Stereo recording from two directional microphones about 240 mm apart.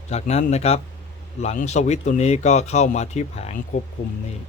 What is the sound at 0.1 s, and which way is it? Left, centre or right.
Speech, left.